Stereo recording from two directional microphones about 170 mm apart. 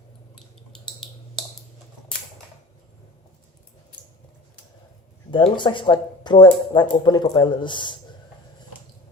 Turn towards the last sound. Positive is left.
turn(degrees=30)  # may be behind; listen again after turning